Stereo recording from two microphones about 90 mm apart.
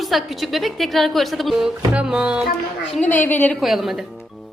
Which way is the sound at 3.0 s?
20° left (ahead or behind).